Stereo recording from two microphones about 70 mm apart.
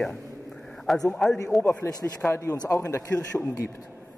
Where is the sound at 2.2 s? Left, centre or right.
Left.